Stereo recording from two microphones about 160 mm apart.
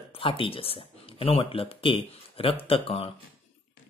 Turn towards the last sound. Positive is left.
turn(degrees=35)  # may be behind; listen again after turning